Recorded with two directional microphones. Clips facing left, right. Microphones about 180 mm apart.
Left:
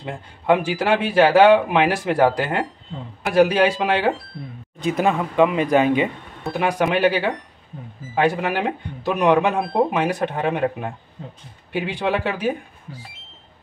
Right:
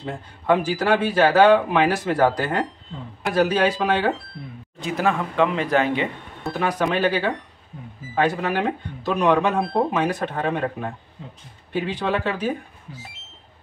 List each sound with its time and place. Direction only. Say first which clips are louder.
0.0 s a man's voice: left 1 dB; 15° left (ahead or behind)